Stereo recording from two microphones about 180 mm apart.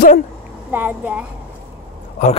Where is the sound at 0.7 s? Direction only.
10° right (ahead or behind).